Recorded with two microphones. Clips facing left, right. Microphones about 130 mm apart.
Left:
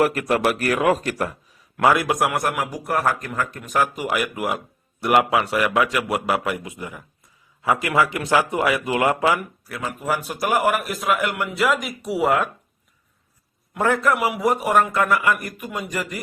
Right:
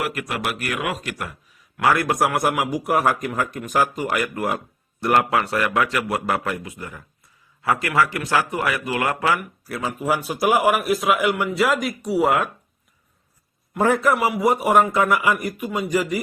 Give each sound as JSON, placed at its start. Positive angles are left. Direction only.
{"t": 0.0, "sound": "a man's voice", "side_deg": 40}
{"t": 1.8, "sound": "a man's voice", "side_deg": 15}
{"t": 2.0, "sound": "a man's voice", "side_deg": 0}
{"t": 3.9, "sound": "a man's voice", "side_deg": 10}
{"t": 9.6, "sound": "a man's voice", "side_deg": -5}
{"t": 13.7, "sound": "a man's voice", "side_deg": -5}